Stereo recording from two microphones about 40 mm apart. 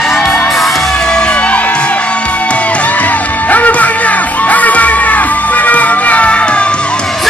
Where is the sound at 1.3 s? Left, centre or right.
Left.